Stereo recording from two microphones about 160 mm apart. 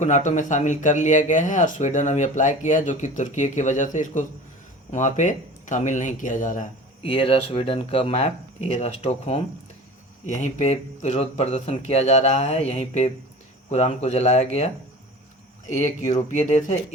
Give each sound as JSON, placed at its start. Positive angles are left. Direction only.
{"t": 0.0, "sound": "speech", "side_deg": 50}
{"t": 7.0, "sound": "speech", "side_deg": 35}
{"t": 15.7, "sound": "speech", "side_deg": 50}